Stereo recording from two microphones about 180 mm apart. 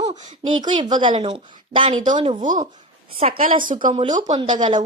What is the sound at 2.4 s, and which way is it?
A woman's voice, 45° right (ahead or behind).